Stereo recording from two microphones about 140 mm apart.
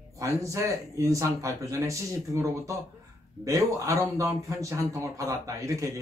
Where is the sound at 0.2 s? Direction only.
20° right (ahead or behind).